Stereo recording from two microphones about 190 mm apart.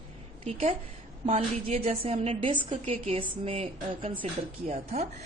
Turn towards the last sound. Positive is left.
turn(degrees=-35)  # may be behind; listen again after turning